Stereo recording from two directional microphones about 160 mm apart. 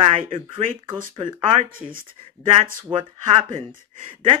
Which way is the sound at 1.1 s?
30° right (ahead or behind).